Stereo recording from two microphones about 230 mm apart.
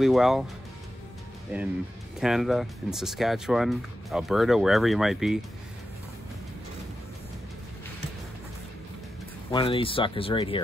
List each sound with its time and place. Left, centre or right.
0.0 s speech: centre
1.5 s speech: centre
9.5 s speech: left